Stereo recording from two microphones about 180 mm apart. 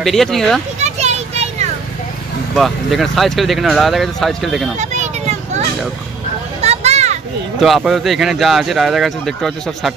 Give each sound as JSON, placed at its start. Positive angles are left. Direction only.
{"t": 0.0, "sound": "speech", "side_deg": 0}
{"t": 0.7, "sound": "children playing", "side_deg": -40}
{"t": 2.5, "sound": "speech", "side_deg": 0}
{"t": 4.7, "sound": "children playing", "side_deg": -40}
{"t": 6.6, "sound": "a sound", "side_deg": -35}
{"t": 7.6, "sound": "speech", "side_deg": 0}